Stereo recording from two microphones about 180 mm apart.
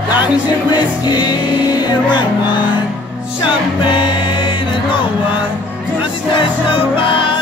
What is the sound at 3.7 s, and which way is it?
Music, 30° left (ahead or behind).